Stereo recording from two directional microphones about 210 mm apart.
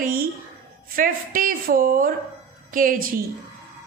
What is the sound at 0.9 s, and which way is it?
A woman's voice, 40° right (ahead or behind).